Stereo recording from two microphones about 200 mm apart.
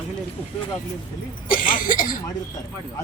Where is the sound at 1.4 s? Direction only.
45° left (ahead or behind).